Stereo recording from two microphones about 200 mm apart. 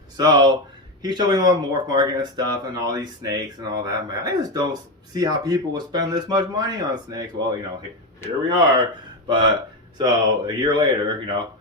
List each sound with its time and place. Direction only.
0.2 s speech: 20° right (ahead or behind)